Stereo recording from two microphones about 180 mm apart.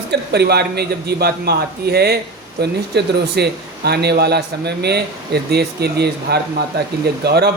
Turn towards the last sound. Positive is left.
turn(degrees=-65)  # may be behind; listen again after turning